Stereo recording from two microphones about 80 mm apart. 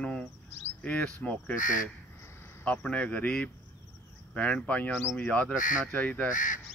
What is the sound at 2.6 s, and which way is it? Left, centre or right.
Speech, centre.